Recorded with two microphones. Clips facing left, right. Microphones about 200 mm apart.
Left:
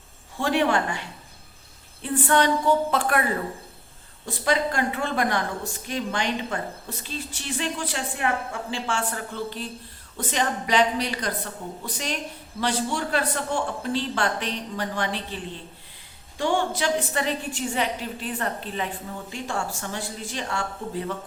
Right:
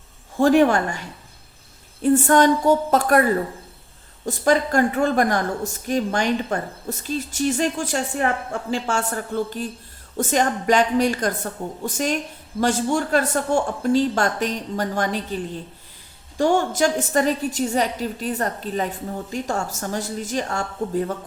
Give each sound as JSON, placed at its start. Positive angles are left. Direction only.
{"t": 0.3, "sound": "a woman's voice", "side_deg": -45}
{"t": 4.3, "sound": "a woman's voice", "side_deg": -45}
{"t": 16.4, "sound": "a woman's voice", "side_deg": -45}